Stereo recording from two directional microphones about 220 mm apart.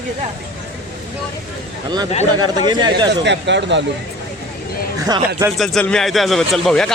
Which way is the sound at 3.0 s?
55° right (ahead or behind).